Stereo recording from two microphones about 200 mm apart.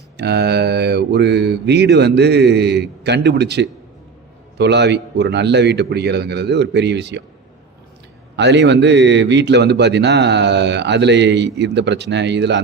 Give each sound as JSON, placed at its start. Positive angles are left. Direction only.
{"t": 0.2, "sound": "a man's voice", "side_deg": -55}
{"t": 8.4, "sound": "a man's voice", "side_deg": -60}